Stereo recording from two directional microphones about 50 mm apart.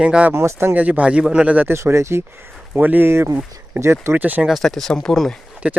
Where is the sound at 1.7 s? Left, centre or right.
Right.